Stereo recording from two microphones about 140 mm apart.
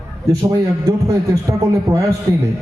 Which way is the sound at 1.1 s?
25° right (ahead or behind).